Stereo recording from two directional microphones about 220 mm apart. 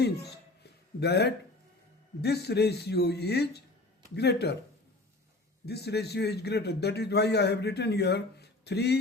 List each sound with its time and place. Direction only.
0.0 s a man's voice: 50° left (ahead or behind)
5.6 s a man's voice: 50° left (ahead or behind)